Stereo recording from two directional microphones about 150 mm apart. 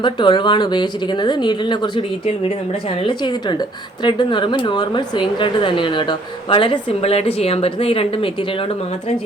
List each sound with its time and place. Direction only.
0.0 s speech: 30° left (ahead or behind)